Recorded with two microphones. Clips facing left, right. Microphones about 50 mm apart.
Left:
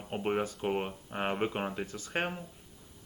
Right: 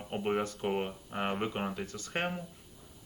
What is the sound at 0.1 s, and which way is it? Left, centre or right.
Speech, centre.